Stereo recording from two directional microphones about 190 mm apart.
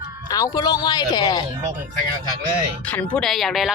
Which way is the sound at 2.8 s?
5° left (ahead or behind).